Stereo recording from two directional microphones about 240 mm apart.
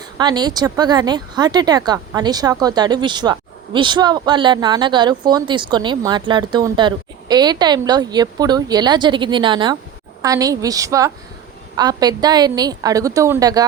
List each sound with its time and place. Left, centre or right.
0.0 s speech: centre